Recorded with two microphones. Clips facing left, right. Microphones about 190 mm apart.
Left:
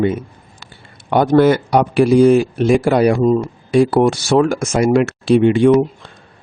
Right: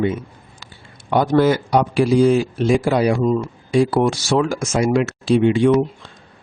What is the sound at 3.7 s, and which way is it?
Speech, 60° left (ahead or behind).